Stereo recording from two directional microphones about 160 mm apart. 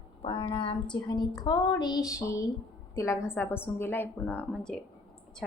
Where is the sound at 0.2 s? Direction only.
35° left (ahead or behind).